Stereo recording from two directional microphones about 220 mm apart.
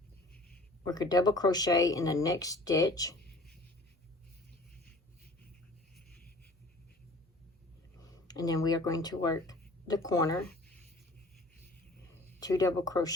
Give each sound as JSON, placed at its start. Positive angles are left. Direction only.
{"t": 0.9, "sound": "speech", "side_deg": 20}
{"t": 8.1, "sound": "speech", "side_deg": 15}
{"t": 12.4, "sound": "speech", "side_deg": 15}